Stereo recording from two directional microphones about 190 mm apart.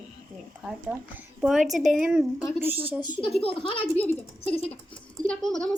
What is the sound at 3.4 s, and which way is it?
Speech, 30° left (ahead or behind).